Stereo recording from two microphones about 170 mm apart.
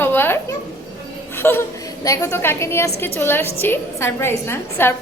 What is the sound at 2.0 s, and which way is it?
A woman's voice, 15° left (ahead or behind).